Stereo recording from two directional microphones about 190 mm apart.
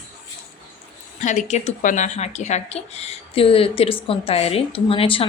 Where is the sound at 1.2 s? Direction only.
40° left (ahead or behind).